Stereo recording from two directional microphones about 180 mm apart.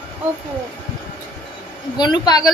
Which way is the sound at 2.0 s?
25° left (ahead or behind).